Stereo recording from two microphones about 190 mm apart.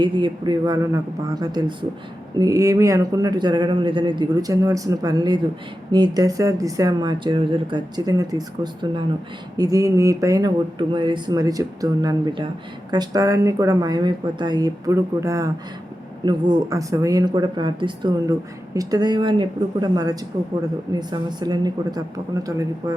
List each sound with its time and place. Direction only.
0.0 s speech: 25° right (ahead or behind)